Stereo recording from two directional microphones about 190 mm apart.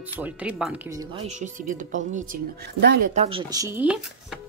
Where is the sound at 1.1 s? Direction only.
35° right (ahead or behind).